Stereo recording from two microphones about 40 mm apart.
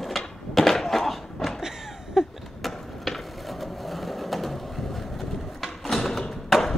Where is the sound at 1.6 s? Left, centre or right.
Centre.